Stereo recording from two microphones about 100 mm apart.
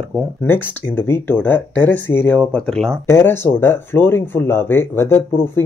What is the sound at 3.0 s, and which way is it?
Speech, 25° left (ahead or behind).